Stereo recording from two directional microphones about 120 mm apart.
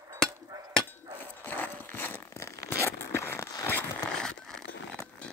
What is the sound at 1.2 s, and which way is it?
Tearing, 15° left (ahead or behind).